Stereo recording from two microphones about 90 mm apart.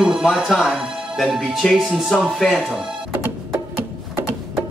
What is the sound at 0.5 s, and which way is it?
Speech, centre (ahead or behind).